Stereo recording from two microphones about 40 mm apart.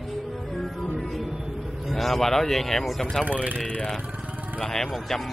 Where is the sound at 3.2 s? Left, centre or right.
Right.